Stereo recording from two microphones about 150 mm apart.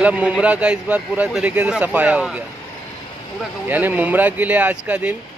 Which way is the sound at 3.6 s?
10° right (ahead or behind).